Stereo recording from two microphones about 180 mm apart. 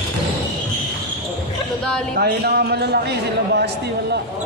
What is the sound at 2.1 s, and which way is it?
A man's voice, 60° right (ahead or behind).